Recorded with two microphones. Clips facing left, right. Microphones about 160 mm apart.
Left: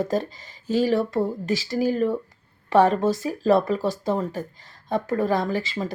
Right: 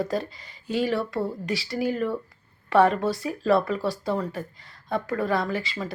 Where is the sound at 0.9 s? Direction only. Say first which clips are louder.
Left 4 dB; 20° left (ahead or behind).